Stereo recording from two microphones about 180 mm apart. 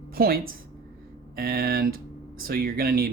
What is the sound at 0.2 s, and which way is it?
Speech, 55° right (ahead or behind).